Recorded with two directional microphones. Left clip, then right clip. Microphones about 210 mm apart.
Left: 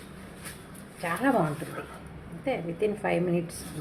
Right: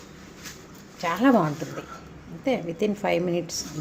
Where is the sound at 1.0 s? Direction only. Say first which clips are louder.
Right 5 dB; 40° right (ahead or behind).